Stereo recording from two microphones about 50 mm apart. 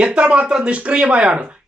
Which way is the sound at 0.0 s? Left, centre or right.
Right.